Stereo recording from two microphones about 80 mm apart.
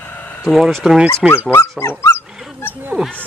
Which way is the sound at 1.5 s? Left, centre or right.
Left.